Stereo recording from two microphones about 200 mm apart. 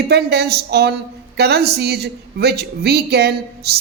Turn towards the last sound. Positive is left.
turn(degrees=-55)  # may be behind; listen again after turning